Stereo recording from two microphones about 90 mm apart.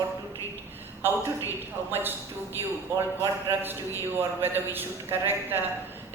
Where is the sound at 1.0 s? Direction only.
25° right (ahead or behind).